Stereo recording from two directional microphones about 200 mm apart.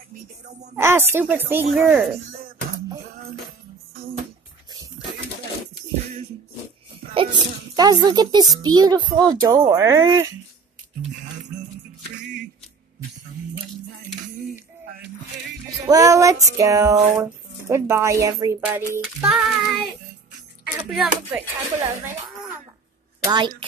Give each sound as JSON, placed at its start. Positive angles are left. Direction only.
{"t": 0.7, "sound": "child singing", "side_deg": -10}
{"t": 7.2, "sound": "a child's voice", "side_deg": -20}
{"t": 8.6, "sound": "child singing", "side_deg": -20}
{"t": 15.9, "sound": "child singing", "side_deg": -15}
{"t": 20.6, "sound": "speech", "side_deg": -5}
{"t": 23.2, "sound": "a woman's voice", "side_deg": -20}